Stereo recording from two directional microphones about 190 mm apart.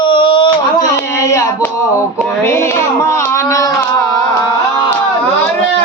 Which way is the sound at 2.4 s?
15° left (ahead or behind).